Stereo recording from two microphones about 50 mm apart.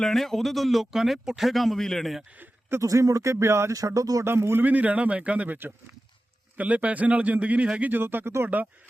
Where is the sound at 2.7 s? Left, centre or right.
Right.